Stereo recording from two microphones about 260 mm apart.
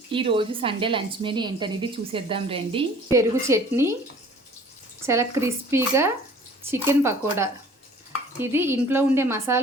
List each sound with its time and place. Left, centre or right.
0.1 s a woman's voice: centre
5.0 s a woman's voice: centre